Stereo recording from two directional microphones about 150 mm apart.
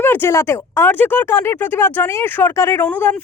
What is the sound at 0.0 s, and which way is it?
Speech, 15° left (ahead or behind).